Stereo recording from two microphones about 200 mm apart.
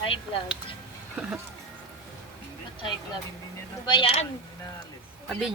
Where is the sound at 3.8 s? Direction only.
25° left (ahead or behind).